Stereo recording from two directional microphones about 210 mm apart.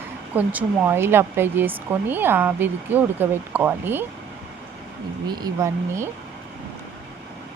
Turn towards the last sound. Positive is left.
turn(degrees=-15)  # may be behind; listen again after turning